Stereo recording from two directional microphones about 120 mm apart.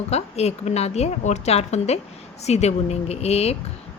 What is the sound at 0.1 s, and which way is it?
A woman's voice, 60° left (ahead or behind).